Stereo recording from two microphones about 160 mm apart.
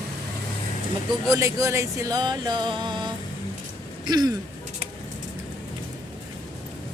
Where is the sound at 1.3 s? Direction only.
20° right (ahead or behind).